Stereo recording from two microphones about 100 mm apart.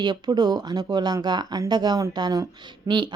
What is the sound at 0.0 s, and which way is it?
A woman's voice, 45° right (ahead or behind).